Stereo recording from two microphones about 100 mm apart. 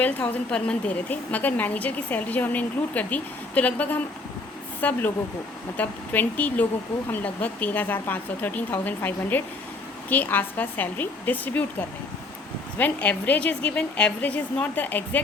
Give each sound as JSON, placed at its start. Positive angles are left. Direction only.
{"t": 0.5, "sound": "a woman's voice", "side_deg": 10}
{"t": 12.8, "sound": "a woman's voice", "side_deg": 15}